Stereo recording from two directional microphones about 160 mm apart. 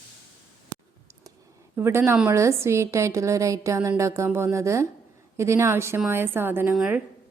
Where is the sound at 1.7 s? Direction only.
15° right (ahead or behind).